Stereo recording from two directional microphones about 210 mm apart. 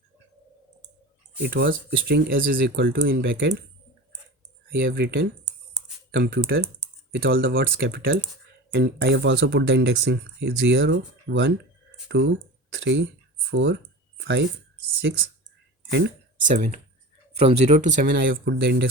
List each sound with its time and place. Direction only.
1.4 s speech: 50° right (ahead or behind)
4.7 s speech: 50° right (ahead or behind)
15.1 s speech: 55° right (ahead or behind)
16.5 s speech: 35° right (ahead or behind)
18.1 s speech: 55° right (ahead or behind)